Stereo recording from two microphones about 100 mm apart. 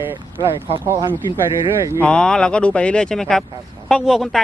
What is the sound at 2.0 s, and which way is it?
Speech, 10° left (ahead or behind).